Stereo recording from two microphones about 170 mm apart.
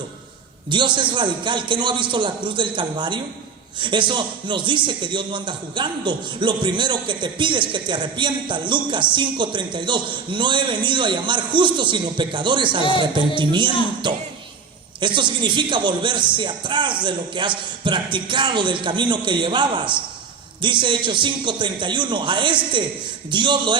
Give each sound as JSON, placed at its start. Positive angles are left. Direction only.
{"t": 0.7, "sound": "a man's voice", "side_deg": -30}
{"t": 15.0, "sound": "a man's voice", "side_deg": -30}